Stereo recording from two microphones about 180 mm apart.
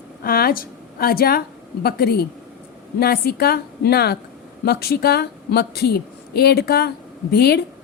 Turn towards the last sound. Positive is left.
turn(degrees=60)  # may be behind; listen again after turning